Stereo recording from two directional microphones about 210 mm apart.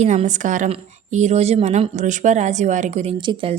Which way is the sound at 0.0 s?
35° right (ahead or behind).